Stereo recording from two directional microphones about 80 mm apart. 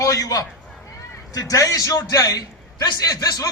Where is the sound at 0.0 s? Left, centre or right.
Left.